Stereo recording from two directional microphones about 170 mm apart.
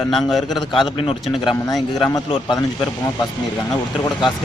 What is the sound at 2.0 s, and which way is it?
Speech, 25° left (ahead or behind).